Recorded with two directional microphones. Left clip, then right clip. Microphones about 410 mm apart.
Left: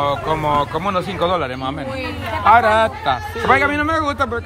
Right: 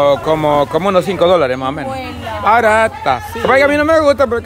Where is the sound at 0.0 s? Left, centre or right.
Centre.